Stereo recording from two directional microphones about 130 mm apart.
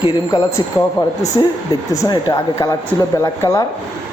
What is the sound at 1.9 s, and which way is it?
A man's voice, 30° left (ahead or behind).